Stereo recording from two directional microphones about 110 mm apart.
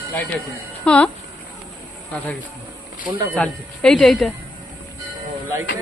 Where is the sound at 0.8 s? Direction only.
10° left (ahead or behind).